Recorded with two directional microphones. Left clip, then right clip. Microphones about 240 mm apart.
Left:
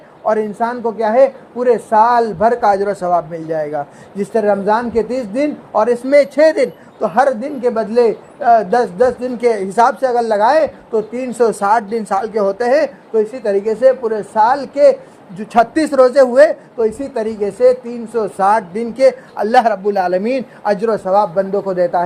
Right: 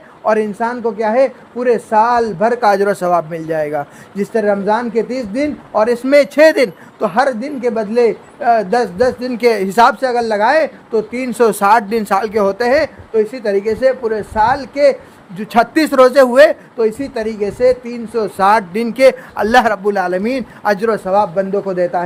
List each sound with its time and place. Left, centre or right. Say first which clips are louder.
0.3 s a man's voice: right 1 dB; right